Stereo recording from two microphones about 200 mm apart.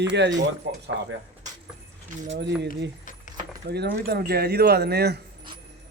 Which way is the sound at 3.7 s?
55° right (ahead or behind).